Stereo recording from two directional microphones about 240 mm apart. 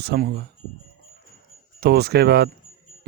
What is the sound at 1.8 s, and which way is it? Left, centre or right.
Speech, right.